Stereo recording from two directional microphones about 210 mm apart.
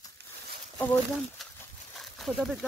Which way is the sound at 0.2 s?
50° right (ahead or behind).